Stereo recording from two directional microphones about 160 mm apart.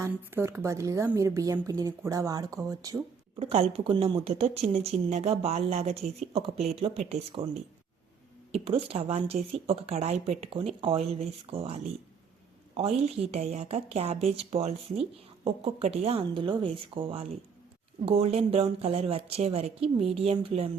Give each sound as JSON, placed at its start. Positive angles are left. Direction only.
{"t": 0.0, "sound": "speech", "side_deg": -15}
{"t": 3.3, "sound": "speech", "side_deg": -40}
{"t": 8.5, "sound": "speech", "side_deg": -35}